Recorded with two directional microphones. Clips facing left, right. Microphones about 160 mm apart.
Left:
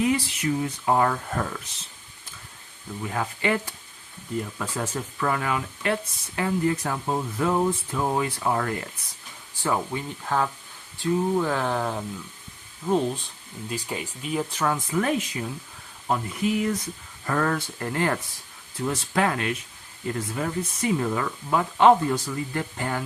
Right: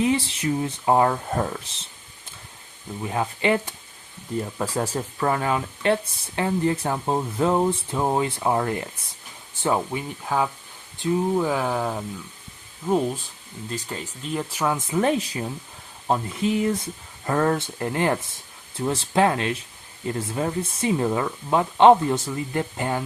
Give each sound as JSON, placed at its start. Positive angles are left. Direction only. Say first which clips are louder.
{"t": 0.0, "sound": "speech", "louder": "right 1 dB", "side_deg": -25}
{"t": 3.0, "sound": "speech", "louder": "right 3 dB", "side_deg": -20}
{"t": 4.5, "sound": "speech", "louder": "right 4 dB", "side_deg": -35}
{"t": 10.2, "sound": "speech", "louder": "right 1 dB", "side_deg": -10}
{"t": 13.7, "sound": "speech", "louder": "left 1 dB", "side_deg": 10}
{"t": 14.6, "sound": "speech", "louder": "right 4 dB", "side_deg": -20}